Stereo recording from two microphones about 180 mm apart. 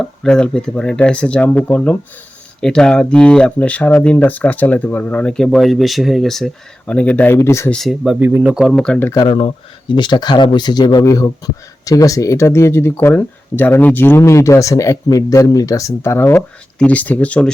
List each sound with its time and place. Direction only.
0.0 s speech: 5° left (ahead or behind)
7.7 s speech: centre (ahead or behind)
9.2 s speech: 25° left (ahead or behind); by 17.5 s 5° left (ahead or behind)